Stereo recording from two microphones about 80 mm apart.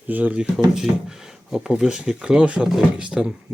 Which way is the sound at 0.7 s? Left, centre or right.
Centre.